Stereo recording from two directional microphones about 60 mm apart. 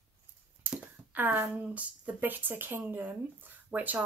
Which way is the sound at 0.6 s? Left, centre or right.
Right.